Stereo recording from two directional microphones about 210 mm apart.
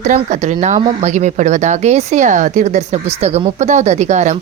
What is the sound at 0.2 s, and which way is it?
Speech, 30° right (ahead or behind).